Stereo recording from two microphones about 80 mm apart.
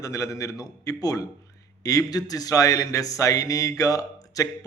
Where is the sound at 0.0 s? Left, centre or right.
Left.